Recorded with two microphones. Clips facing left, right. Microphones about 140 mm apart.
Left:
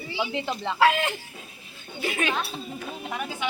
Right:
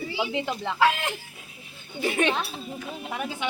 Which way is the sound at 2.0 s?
30° right (ahead or behind).